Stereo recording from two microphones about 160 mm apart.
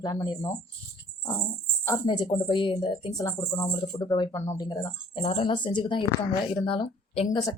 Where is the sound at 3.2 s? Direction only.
20° left (ahead or behind).